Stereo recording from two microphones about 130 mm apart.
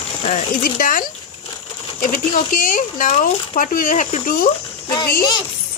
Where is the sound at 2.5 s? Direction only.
90° left.